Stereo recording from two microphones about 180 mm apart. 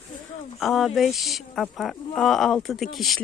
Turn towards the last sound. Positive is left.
turn(degrees=0)  # may be behind; listen again after turning